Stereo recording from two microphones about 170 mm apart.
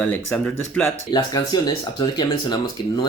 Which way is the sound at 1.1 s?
25° left (ahead or behind).